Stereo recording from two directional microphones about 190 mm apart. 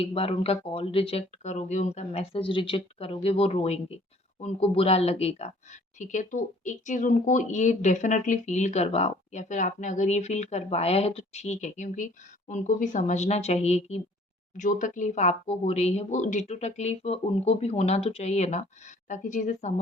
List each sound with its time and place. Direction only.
0.0 s speech: 30° left (ahead or behind)